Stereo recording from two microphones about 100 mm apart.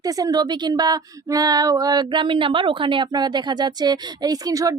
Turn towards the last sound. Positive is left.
turn(degrees=-35)  # may be behind; listen again after turning